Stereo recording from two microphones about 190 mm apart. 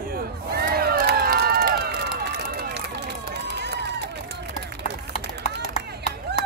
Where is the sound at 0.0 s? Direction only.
50° right (ahead or behind).